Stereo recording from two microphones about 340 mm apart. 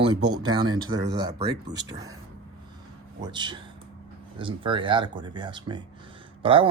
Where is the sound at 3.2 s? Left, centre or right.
Centre.